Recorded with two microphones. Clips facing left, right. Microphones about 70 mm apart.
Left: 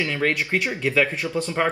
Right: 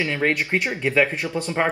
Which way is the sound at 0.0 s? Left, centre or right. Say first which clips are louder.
Right 1 dB; right.